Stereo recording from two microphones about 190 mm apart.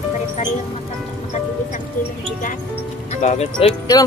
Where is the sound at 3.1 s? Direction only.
35° left (ahead or behind).